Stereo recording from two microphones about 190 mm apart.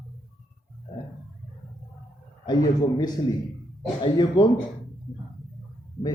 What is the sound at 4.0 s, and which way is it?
Speech, 25° left (ahead or behind).